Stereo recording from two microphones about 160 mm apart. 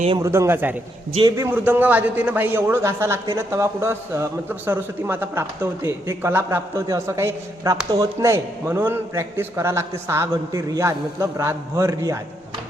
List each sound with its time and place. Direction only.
0.2 s a man's voice: 15° right (ahead or behind)